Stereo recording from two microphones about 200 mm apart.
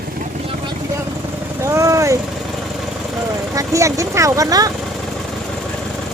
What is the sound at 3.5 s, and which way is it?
Speech, 15° right (ahead or behind).